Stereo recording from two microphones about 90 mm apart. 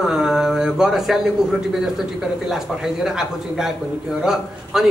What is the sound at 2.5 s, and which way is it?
A man's voice, 5° right (ahead or behind).